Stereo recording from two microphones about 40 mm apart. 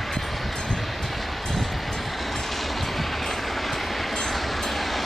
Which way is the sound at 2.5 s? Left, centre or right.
Centre.